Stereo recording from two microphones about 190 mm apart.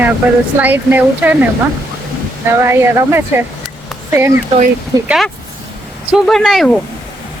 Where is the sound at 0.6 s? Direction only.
10° right (ahead or behind).